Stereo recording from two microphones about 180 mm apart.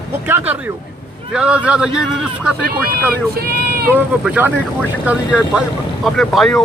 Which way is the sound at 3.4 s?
55° right (ahead or behind).